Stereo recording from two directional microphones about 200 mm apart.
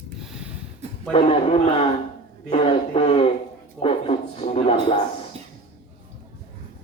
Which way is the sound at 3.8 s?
30° left (ahead or behind).